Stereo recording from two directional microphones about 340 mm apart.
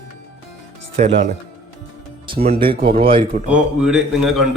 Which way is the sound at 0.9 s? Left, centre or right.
Right.